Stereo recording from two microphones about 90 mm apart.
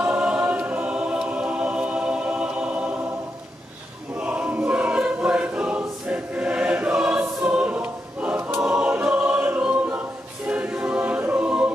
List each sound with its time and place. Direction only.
0.0 s choir: 10° right (ahead or behind)
4.2 s choir: 15° right (ahead or behind)